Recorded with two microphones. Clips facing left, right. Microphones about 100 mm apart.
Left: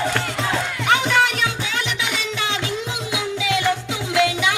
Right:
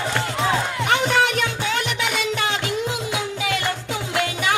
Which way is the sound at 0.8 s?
45° right (ahead or behind).